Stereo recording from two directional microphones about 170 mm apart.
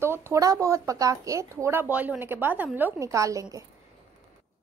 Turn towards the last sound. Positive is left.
turn(degrees=-20)  # may be behind; listen again after turning